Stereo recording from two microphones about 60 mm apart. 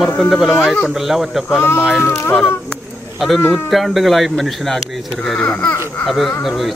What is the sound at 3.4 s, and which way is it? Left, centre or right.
Speech, left.